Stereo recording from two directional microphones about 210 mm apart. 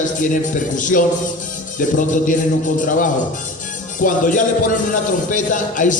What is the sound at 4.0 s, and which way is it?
Speech, 40° left (ahead or behind).